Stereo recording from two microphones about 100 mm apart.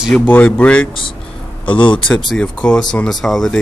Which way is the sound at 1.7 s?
55° left (ahead or behind).